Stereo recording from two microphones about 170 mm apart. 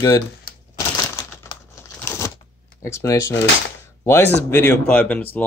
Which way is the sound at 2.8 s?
15° left (ahead or behind).